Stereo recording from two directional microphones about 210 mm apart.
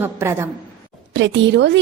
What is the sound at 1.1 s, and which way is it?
Speech, 60° right (ahead or behind).